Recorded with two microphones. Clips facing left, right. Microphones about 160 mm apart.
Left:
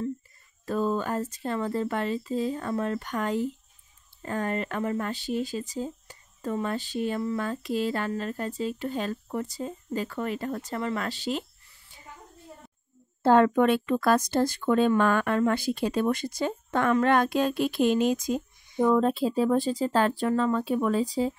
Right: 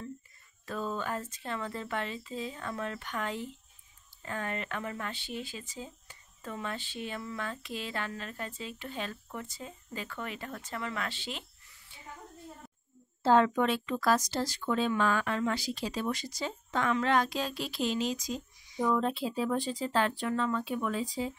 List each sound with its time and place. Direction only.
0.7 s speech: 40° left (ahead or behind)
13.2 s speech: 55° left (ahead or behind); by 21.3 s 35° left (ahead or behind)